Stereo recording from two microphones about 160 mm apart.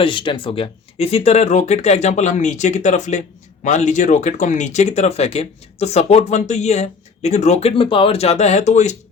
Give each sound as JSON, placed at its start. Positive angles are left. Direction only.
{"t": 0.0, "sound": "speech", "side_deg": 30}